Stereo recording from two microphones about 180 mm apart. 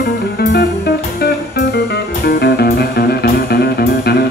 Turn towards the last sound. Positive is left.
turn(degrees=60)  # may be behind; listen again after turning